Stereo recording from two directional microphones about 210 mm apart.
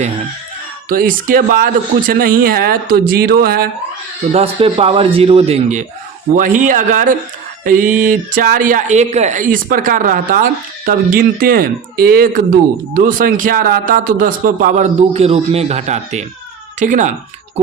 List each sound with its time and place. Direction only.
0.9 s speech: 40° right (ahead or behind)
4.3 s speech: 30° right (ahead or behind)